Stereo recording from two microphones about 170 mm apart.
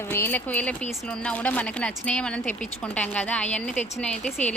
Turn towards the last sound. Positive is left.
turn(degrees=5)  # may be behind; listen again after turning